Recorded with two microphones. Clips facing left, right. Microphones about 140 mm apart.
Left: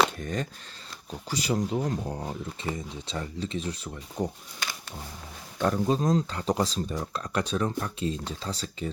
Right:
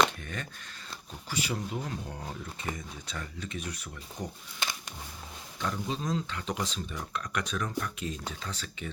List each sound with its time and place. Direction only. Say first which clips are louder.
0.2 s speech: left 8 dB; 35° left (ahead or behind)
4.6 s a sound: even; 25° right (ahead or behind)
5.5 s speech: left 9 dB; 50° left (ahead or behind); by 8.9 s 35° left (ahead or behind)